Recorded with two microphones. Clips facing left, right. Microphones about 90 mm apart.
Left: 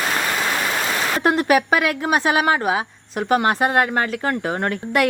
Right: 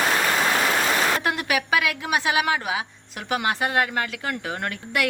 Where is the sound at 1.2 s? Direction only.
40° left (ahead or behind).